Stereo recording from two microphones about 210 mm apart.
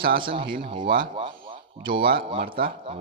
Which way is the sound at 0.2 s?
25° right (ahead or behind).